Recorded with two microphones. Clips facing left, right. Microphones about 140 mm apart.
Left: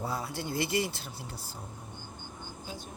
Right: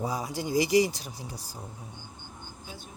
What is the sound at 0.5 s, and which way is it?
Speech, 90° right.